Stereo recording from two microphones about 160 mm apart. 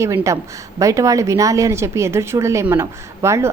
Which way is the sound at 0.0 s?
20° right (ahead or behind).